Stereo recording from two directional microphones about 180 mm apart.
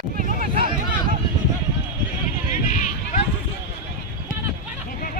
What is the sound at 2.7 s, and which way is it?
Run, 45° left (ahead or behind).